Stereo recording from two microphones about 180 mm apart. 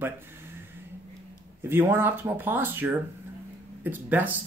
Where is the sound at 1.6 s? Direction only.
10° right (ahead or behind).